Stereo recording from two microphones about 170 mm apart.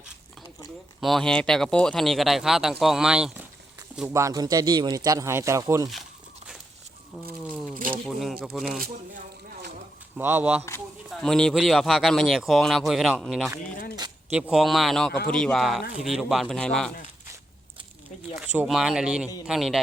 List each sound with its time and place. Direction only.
1.0 s speech: centre (ahead or behind)
4.1 s speech: 20° right (ahead or behind)
7.5 s a sound: 5° left (ahead or behind)
8.0 s speech: centre (ahead or behind)
8.8 s a sound: 65° right (ahead or behind)
10.2 s speech: 10° right (ahead or behind)
11.1 s speech: 5° left (ahead or behind)
18.3 s speech: 5° right (ahead or behind)